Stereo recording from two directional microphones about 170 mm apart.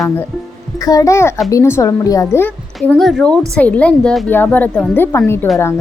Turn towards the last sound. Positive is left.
turn(degrees=15)  # may be behind; listen again after turning